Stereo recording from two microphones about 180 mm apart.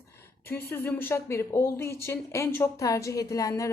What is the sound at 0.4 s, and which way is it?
A man's voice, 10° left (ahead or behind).